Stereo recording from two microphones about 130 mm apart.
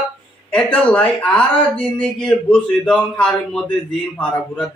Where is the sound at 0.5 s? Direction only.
10° left (ahead or behind).